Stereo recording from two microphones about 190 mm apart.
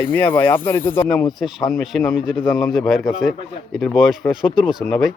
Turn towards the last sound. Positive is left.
turn(degrees=0)  # may be behind; listen again after turning